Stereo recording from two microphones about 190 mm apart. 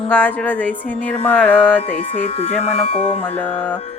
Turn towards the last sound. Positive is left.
turn(degrees=5)  # may be behind; listen again after turning